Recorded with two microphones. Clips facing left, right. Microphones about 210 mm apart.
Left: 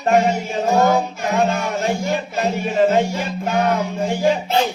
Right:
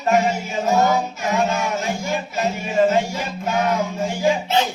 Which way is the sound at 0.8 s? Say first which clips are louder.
Left 2 dB; 50° left (ahead or behind).